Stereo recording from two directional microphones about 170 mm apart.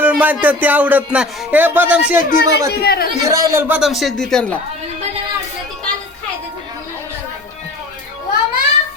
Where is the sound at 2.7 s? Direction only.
70° left (ahead or behind).